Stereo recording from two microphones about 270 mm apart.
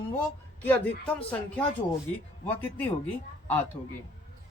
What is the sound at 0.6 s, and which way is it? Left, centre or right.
A man's voice, centre.